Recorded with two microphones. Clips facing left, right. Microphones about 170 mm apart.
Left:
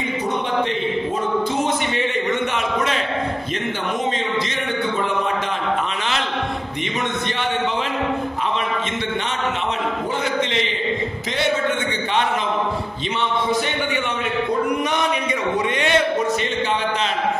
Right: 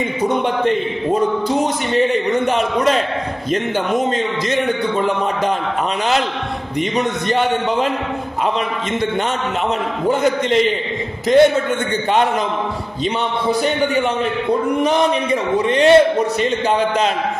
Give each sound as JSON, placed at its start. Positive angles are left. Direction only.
{"t": 1.5, "sound": "a man's voice", "side_deg": -35}
{"t": 10.2, "sound": "a man's voice", "side_deg": -50}
{"t": 14.8, "sound": "a man's voice", "side_deg": -30}